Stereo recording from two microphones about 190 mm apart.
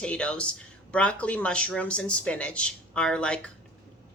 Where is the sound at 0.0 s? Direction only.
5° left (ahead or behind).